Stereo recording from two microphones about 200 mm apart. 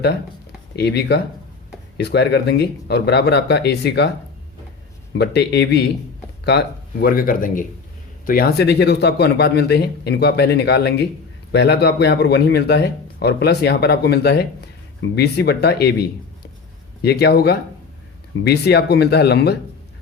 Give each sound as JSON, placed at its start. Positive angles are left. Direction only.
{"t": 0.8, "sound": "speech", "side_deg": 55}
{"t": 5.1, "sound": "speech", "side_deg": 55}